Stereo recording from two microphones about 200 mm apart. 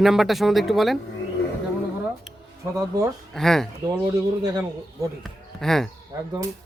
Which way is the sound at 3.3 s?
Centre (ahead or behind).